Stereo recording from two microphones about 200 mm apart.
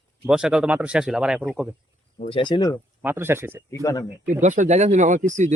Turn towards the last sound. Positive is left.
turn(degrees=-40)  # may be behind; listen again after turning